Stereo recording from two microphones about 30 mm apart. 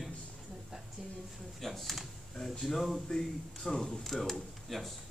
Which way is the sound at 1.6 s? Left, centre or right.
Centre.